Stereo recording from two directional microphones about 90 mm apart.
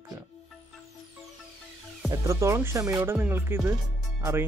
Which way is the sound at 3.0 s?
25° right (ahead or behind).